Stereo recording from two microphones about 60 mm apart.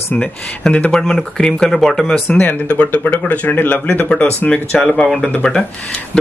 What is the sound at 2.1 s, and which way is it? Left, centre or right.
Speech, left.